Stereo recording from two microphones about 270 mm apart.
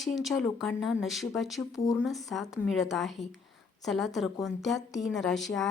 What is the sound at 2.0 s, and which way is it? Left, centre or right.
Speech, centre.